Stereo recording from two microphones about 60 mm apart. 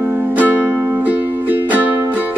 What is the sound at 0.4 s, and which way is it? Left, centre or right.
Music, right.